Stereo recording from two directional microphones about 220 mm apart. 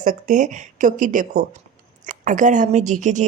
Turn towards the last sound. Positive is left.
turn(degrees=-35)  # may be behind; listen again after turning